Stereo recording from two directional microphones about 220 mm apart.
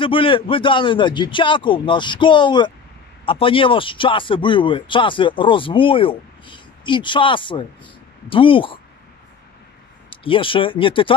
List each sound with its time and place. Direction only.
0.0 s speech: 25° left (ahead or behind)
10.0 s speech: 25° left (ahead or behind)